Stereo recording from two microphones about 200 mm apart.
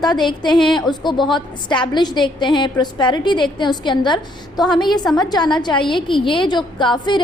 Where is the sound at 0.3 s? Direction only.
25° left (ahead or behind).